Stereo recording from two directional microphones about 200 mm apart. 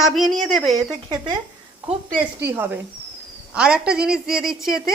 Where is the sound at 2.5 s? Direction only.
10° right (ahead or behind).